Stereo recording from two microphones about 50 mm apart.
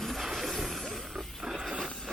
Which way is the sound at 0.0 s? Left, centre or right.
Centre.